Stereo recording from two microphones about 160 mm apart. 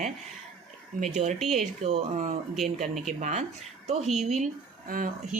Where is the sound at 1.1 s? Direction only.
45° right (ahead or behind).